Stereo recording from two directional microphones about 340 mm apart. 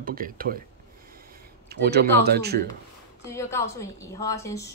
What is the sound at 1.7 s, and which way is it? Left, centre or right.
Speech, right.